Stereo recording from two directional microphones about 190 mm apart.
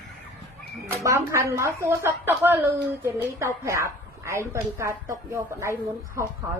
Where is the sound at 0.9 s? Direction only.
15° right (ahead or behind).